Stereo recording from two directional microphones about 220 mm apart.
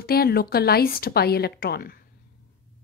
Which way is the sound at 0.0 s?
45° left (ahead or behind).